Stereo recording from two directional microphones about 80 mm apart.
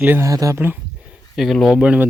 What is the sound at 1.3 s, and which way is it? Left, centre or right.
Speech, centre.